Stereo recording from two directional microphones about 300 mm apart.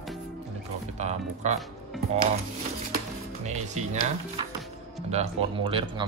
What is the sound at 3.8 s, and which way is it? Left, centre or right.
Speech, right.